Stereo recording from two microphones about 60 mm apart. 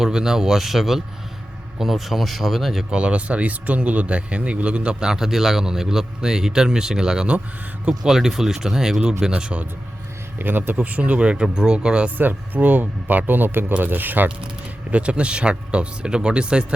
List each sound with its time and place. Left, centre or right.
0.0 s speech: centre
2.9 s speech: centre
9.4 s speech: centre
10.3 s speech: right; by 12.1 s centre
12.1 s speech: right; by 16.6 s centre